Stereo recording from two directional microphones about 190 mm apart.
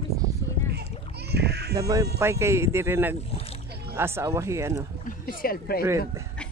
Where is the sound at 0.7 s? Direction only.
60° right (ahead or behind).